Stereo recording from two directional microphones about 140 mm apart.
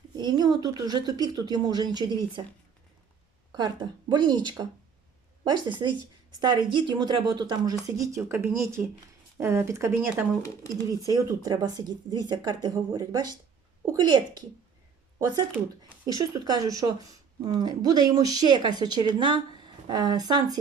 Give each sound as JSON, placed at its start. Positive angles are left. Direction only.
{"t": 0.2, "sound": "a woman's voice", "side_deg": -30}
{"t": 4.1, "sound": "a woman's voice", "side_deg": -30}
{"t": 10.4, "sound": "speech", "side_deg": 20}
{"t": 11.0, "sound": "a woman's voice", "side_deg": -25}
{"t": 15.8, "sound": "a woman's voice", "side_deg": -30}